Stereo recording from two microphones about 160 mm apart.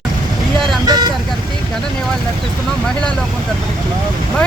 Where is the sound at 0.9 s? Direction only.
25° right (ahead or behind).